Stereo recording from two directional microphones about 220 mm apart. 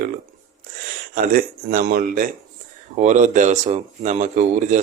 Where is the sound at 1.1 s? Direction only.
40° right (ahead or behind).